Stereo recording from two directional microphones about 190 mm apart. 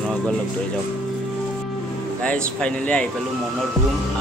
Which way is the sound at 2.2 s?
5° left (ahead or behind).